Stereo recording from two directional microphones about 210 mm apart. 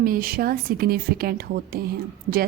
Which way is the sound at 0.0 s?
45° right (ahead or behind).